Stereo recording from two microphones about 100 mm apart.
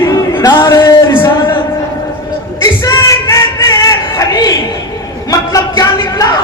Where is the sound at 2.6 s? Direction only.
35° left (ahead or behind).